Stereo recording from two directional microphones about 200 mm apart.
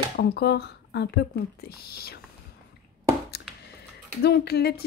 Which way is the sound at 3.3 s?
55° left (ahead or behind).